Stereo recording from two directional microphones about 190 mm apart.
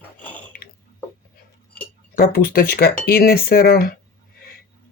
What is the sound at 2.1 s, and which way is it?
Speech, 50° left (ahead or behind).